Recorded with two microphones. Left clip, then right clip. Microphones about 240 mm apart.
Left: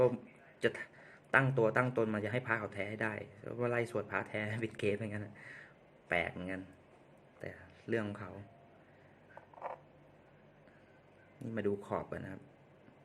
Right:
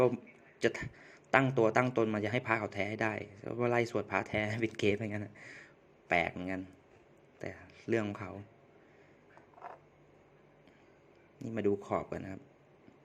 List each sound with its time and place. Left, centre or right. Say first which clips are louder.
0.6 s a man's voice: right 2 dB; centre
11.3 s speech: right 4 dB; centre